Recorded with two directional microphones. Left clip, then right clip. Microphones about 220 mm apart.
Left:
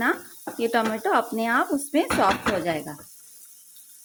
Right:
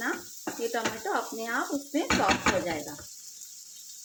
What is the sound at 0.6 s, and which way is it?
Speech, 45° left (ahead or behind).